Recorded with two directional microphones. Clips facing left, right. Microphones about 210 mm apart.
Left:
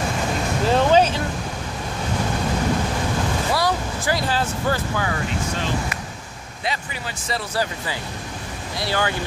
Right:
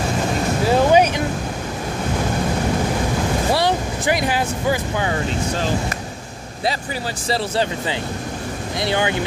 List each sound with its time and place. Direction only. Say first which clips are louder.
0.7 s vehicle: right 2 dB; 10° right (ahead or behind)
3.5 s vehicle: right 3 dB; 20° right (ahead or behind)
5.0 s speech: right 3 dB; 30° right (ahead or behind)
7.2 s speech: right 4 dB; 25° right (ahead or behind)